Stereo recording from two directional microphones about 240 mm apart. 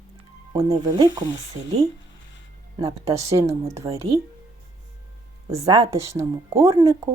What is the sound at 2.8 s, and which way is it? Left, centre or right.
Speech, centre.